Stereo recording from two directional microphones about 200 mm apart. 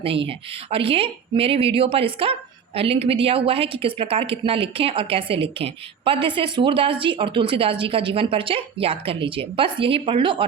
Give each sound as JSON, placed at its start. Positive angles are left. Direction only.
{"t": 0.0, "sound": "a woman's voice", "side_deg": -25}